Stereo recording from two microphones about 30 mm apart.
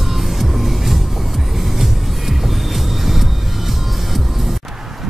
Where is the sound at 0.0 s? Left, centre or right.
Centre.